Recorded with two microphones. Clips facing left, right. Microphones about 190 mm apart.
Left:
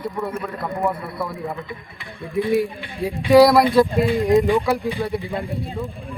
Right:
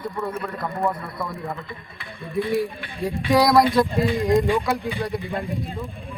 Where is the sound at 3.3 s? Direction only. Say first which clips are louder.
Left 5 dB; 5° left (ahead or behind).